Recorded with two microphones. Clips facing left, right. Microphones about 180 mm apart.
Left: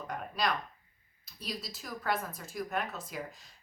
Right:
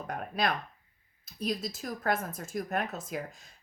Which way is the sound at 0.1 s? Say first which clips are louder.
Right 2 dB; 55° right (ahead or behind).